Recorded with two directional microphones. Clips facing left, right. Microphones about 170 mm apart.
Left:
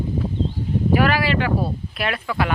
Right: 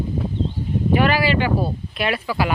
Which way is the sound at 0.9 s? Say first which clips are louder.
Right 1 dB; centre (ahead or behind).